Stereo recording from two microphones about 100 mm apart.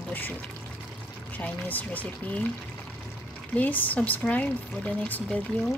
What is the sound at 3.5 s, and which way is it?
Speech, 15° left (ahead or behind).